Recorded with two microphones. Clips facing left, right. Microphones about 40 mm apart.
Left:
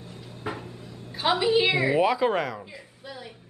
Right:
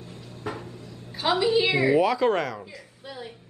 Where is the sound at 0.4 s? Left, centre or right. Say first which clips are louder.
Even; centre.